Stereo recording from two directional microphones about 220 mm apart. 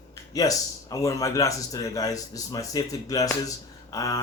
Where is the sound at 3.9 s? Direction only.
15° left (ahead or behind).